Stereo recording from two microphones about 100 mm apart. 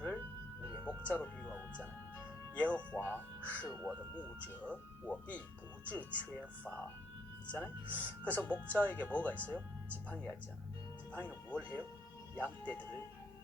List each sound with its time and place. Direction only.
0.9 s music: 15° left (ahead or behind)
1.5 s music: 20° right (ahead or behind)
2.6 s speech: 15° left (ahead or behind)